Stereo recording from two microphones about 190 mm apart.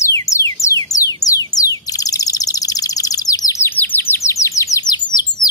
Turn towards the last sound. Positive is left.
turn(degrees=20)  # may be behind; listen again after turning